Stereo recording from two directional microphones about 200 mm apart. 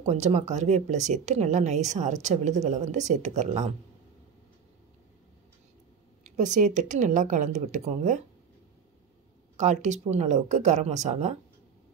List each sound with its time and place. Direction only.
0.0 s speech: 35° right (ahead or behind)
6.2 s speech: 40° right (ahead or behind)
9.6 s speech: 35° right (ahead or behind)